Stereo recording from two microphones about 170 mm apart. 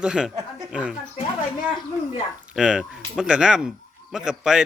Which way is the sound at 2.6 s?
5° right (ahead or behind).